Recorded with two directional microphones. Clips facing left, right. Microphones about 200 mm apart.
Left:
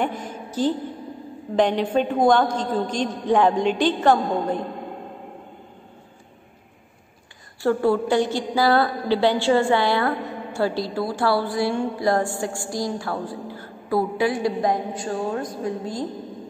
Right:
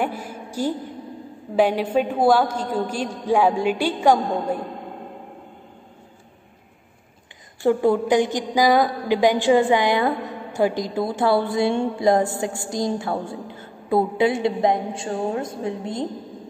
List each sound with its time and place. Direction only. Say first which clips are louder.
0.0 s a woman's voice: even; 10° right (ahead or behind)
7.6 s a woman's voice: right 2 dB; 20° right (ahead or behind)